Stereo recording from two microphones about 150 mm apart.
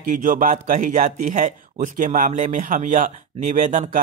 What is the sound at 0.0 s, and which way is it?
Speech, 60° right (ahead or behind).